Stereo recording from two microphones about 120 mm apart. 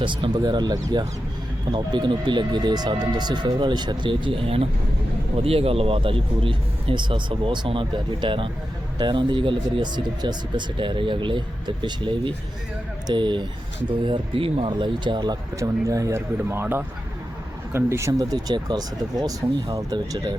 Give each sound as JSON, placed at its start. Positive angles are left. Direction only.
{"t": 0.0, "sound": "speech", "side_deg": -45}
{"t": 15.5, "sound": "speech", "side_deg": -30}